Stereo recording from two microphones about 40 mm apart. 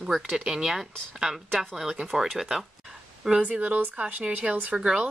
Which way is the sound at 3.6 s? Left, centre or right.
Right.